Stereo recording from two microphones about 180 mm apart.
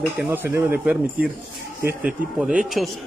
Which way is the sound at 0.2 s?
10° right (ahead or behind).